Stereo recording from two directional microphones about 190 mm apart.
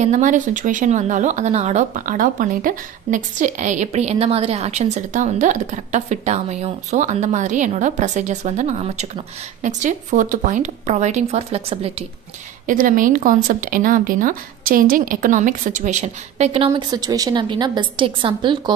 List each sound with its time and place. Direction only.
0.0 s speech: 40° right (ahead or behind)
12.6 s speech: 45° right (ahead or behind); by 18.6 s 25° right (ahead or behind)